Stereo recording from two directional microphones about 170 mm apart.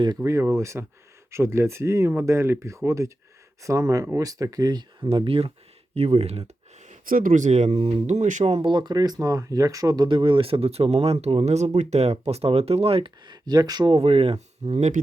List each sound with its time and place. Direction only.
0.2 s speech: 15° right (ahead or behind)
5.0 s speech: 30° right (ahead or behind)
7.0 s speech: 55° right (ahead or behind)